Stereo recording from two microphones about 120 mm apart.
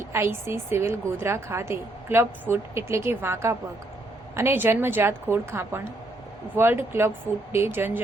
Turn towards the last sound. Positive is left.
turn(degrees=-20)  # may be behind; listen again after turning